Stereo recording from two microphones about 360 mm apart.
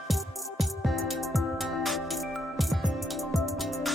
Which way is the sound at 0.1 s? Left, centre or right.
Centre.